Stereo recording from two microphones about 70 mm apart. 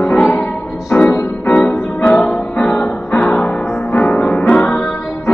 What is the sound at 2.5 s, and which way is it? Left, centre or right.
Music, centre.